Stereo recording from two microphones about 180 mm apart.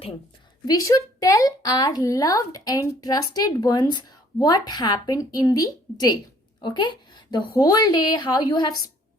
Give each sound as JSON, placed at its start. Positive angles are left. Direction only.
{"t": 0.7, "sound": "speech", "side_deg": 20}